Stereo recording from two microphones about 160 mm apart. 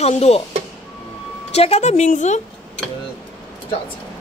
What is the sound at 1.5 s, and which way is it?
Speech, 40° left (ahead or behind).